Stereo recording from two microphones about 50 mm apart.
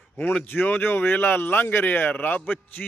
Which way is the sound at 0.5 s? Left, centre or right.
Left.